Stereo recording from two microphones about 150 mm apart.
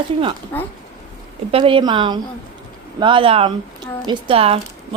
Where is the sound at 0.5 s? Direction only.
10° left (ahead or behind).